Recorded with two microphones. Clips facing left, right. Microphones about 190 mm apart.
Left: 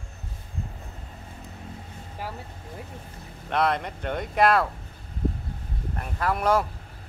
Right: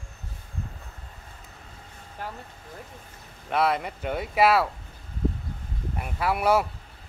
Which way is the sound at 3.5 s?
5° right (ahead or behind).